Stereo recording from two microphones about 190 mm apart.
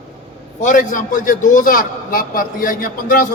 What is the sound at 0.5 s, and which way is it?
A man's voice, 40° left (ahead or behind).